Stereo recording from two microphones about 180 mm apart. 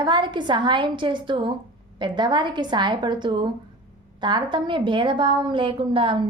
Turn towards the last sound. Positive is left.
turn(degrees=-30)  # may be behind; listen again after turning